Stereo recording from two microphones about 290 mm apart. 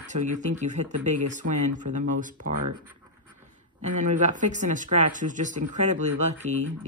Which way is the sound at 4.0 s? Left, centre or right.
Right.